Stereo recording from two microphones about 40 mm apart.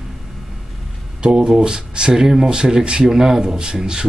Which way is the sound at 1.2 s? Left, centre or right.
Right.